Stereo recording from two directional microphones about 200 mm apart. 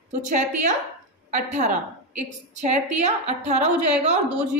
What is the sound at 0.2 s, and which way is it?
A woman's voice, 40° right (ahead or behind).